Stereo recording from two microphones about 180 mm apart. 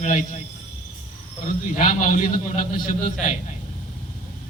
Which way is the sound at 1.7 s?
45° left (ahead or behind).